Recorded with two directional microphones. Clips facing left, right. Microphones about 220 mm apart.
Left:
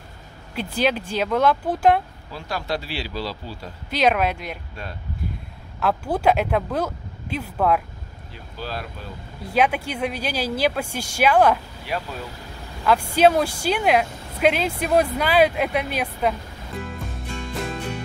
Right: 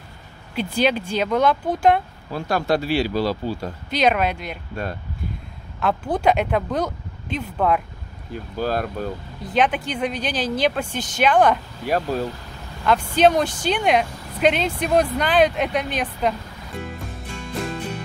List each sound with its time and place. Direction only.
0.6 s speech: 5° left (ahead or behind)
2.3 s speech: 50° right (ahead or behind)
3.9 s speech: 5° left (ahead or behind)
5.8 s speech: 5° left (ahead or behind)
8.3 s speech: 50° right (ahead or behind)
9.4 s speech: 10° left (ahead or behind)
11.8 s speech: 45° right (ahead or behind)
12.8 s speech: 10° left (ahead or behind)